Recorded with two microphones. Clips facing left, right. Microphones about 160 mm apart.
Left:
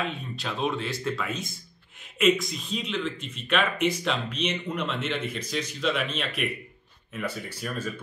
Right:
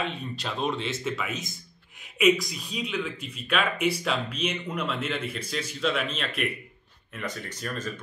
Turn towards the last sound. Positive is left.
turn(degrees=10)  # may be behind; listen again after turning